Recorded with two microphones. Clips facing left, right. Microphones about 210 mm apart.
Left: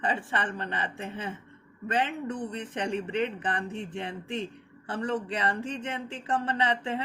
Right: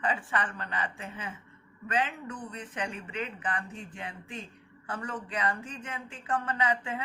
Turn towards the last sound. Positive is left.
turn(degrees=30)  # may be behind; listen again after turning